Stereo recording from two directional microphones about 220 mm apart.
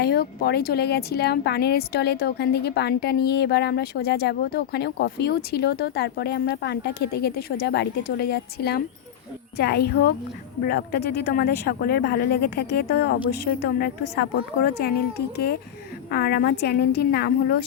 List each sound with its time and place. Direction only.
0.0 s speech: 45° left (ahead or behind)
16.0 s speech: 45° left (ahead or behind)